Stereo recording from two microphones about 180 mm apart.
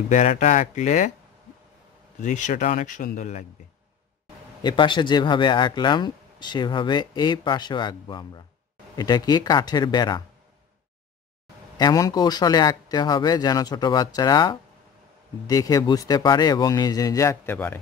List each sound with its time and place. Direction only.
0.1 s speech: 45° left (ahead or behind)
2.1 s speech: 45° left (ahead or behind)
4.6 s speech: 25° left (ahead or behind)
11.8 s speech: 20° left (ahead or behind)